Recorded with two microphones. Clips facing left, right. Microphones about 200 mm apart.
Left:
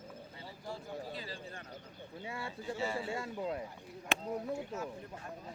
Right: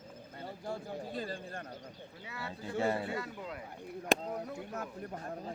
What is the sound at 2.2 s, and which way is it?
Speech, 25° left (ahead or behind).